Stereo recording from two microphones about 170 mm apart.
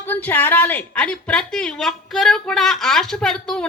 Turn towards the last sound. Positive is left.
turn(degrees=5)  # may be behind; listen again after turning